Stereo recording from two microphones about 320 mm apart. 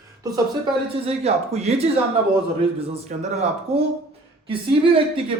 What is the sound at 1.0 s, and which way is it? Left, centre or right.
A man's voice, centre.